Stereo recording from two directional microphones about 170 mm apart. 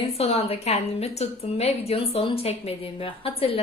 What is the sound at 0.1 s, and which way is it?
A woman's voice, 35° left (ahead or behind).